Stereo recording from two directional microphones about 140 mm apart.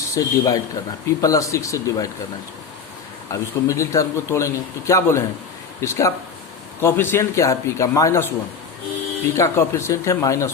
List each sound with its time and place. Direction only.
0.1 s a man's voice: 25° left (ahead or behind)
3.3 s a man's voice: 25° left (ahead or behind)
9.3 s a man's voice: 20° left (ahead or behind)